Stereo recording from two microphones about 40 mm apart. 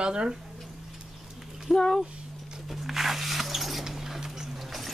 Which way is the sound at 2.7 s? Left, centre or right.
Centre.